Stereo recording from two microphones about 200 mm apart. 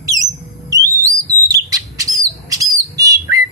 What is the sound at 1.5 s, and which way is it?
Bird, 15° right (ahead or behind).